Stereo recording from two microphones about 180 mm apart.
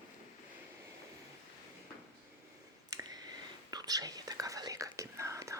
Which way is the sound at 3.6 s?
20° right (ahead or behind).